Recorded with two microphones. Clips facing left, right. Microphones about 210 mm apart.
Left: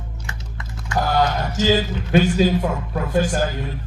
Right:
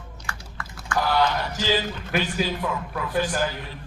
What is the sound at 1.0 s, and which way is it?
A man's voice, 45° left (ahead or behind).